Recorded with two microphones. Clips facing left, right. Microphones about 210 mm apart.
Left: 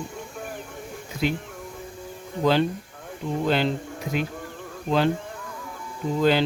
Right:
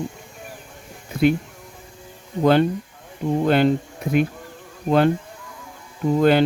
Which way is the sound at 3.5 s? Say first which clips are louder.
Right 6 dB; 55° right (ahead or behind).